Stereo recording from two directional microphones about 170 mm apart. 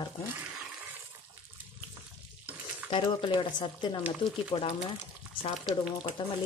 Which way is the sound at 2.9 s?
30° left (ahead or behind).